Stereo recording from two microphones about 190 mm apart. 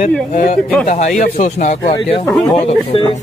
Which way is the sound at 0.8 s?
40° left (ahead or behind).